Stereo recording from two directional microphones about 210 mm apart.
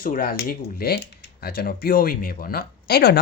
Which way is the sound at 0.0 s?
45° left (ahead or behind).